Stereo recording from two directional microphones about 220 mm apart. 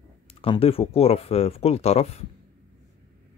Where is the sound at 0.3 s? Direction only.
25° left (ahead or behind).